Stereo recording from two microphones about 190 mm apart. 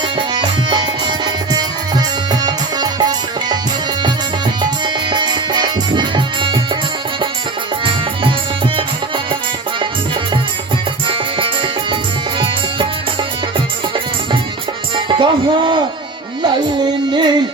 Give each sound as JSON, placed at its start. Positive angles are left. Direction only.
{"t": 0.2, "sound": "music", "side_deg": -25}
{"t": 5.1, "sound": "music", "side_deg": -25}
{"t": 11.1, "sound": "music", "side_deg": -25}
{"t": 14.9, "sound": "music", "side_deg": -25}